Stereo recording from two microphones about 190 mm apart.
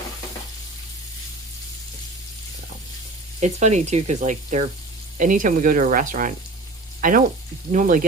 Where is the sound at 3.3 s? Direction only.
40° right (ahead or behind).